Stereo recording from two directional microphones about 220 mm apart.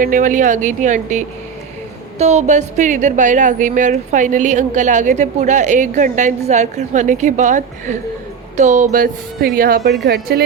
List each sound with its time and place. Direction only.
0.0 s a woman's voice: 35° right (ahead or behind)